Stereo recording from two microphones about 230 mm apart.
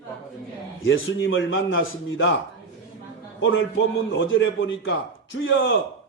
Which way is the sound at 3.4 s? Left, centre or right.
Left.